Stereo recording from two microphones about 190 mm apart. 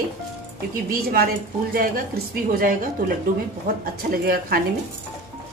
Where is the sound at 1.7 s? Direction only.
50° right (ahead or behind).